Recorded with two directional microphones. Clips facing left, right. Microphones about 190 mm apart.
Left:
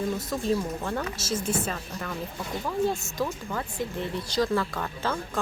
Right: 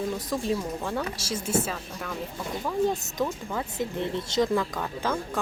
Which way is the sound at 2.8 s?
15° right (ahead or behind).